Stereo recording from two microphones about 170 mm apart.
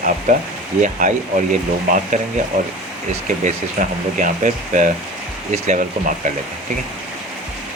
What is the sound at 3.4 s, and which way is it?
Speech, 50° right (ahead or behind).